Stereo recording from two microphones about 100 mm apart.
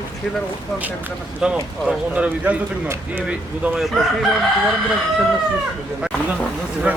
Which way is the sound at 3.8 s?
Centre (ahead or behind).